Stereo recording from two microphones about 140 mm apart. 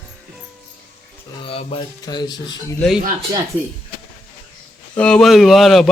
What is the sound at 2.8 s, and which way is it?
Speech, centre (ahead or behind).